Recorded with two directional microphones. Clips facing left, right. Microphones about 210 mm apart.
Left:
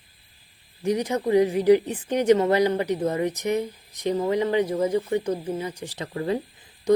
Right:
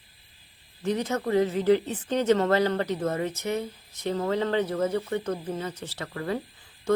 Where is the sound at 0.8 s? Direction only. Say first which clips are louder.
Left 3 dB; 15° left (ahead or behind).